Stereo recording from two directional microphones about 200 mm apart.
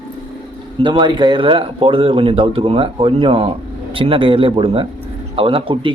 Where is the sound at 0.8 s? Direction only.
25° right (ahead or behind).